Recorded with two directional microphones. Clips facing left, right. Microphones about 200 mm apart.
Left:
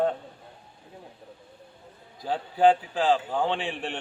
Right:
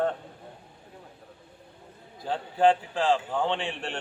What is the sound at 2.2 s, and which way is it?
A man's voice, 5° left (ahead or behind).